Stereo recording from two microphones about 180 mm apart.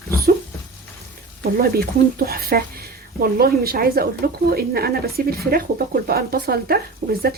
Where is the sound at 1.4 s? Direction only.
55° right (ahead or behind).